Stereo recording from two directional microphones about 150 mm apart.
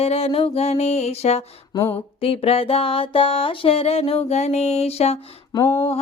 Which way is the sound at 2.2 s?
40° left (ahead or behind).